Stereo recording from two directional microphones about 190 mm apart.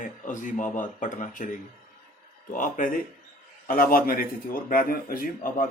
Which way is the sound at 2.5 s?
45° left (ahead or behind).